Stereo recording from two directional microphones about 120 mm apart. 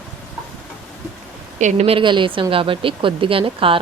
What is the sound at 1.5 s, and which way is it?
Speech, 90° right.